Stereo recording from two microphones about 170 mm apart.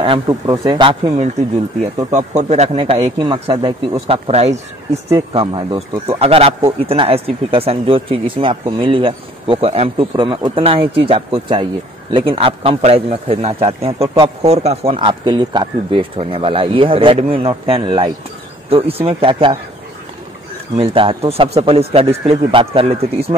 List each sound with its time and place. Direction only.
0.0 s speech: 25° right (ahead or behind)
1.0 s a man's voice: 40° right (ahead or behind)
20.7 s a man's voice: 35° right (ahead or behind)